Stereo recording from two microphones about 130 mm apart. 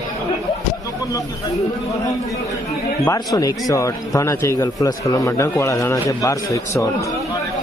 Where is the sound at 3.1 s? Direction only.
25° left (ahead or behind).